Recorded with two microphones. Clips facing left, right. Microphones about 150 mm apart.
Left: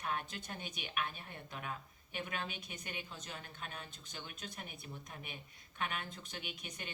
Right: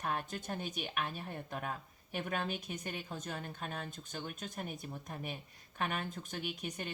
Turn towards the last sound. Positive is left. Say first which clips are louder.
# right 7 dB
turn(degrees=-45)  # may be behind; listen again after turning